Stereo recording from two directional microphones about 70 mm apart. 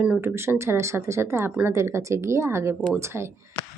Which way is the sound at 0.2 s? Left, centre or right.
Right.